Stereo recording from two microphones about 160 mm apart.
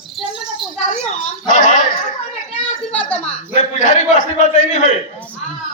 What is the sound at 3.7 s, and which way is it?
A man's voice, 50° left (ahead or behind).